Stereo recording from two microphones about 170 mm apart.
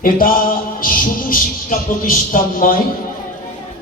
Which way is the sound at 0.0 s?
55° left (ahead or behind).